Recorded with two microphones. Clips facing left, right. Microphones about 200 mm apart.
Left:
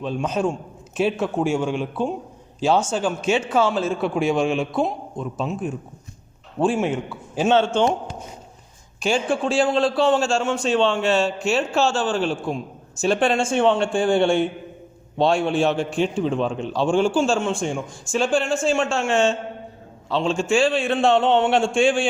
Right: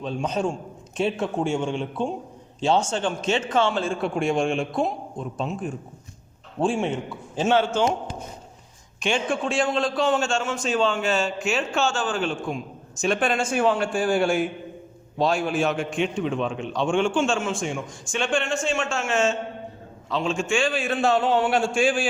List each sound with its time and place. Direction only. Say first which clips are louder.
0.0 s a man's voice: left 3 dB; 5° left (ahead or behind)
7.3 s speech: left 3 dB; 20° left (ahead or behind)
9.0 s a man's voice: left 3 dB; 35° left (ahead or behind)
16.1 s a man's voice: left 3 dB; centre (ahead or behind)
16.8 s a man's voice: left 3 dB; 35° left (ahead or behind)
17.2 s a man's voice: left 3 dB; centre (ahead or behind)
18.9 s a man's voice: left 4 dB; 30° left (ahead or behind)
20.3 s speech: left 6 dB; 35° left (ahead or behind)